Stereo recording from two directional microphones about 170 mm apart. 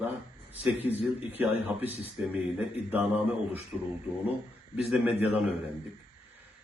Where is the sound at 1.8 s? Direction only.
35° left (ahead or behind).